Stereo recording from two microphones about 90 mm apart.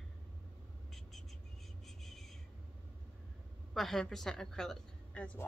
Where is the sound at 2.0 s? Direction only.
5° left (ahead or behind).